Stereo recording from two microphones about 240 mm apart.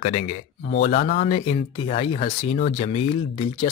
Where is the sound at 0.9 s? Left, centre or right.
Left.